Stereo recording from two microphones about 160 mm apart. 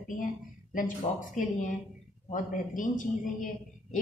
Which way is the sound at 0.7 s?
55° left (ahead or behind).